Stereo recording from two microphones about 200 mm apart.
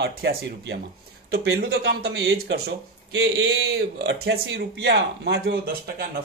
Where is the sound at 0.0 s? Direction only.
55° right (ahead or behind).